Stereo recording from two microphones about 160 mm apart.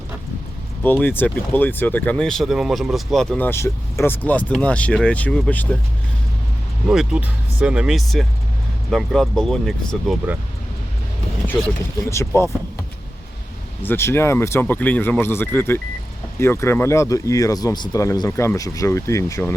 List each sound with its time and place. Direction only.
0.8 s speech: 10° left (ahead or behind)
6.8 s speech: 5° right (ahead or behind)
12.0 s speech: 15° left (ahead or behind)
13.8 s speech: 15° left (ahead or behind)